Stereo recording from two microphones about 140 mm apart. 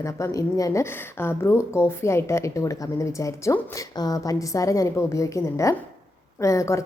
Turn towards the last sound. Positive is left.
turn(degrees=20)  # may be behind; listen again after turning